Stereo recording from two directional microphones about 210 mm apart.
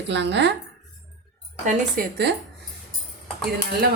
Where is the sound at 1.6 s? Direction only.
40° right (ahead or behind).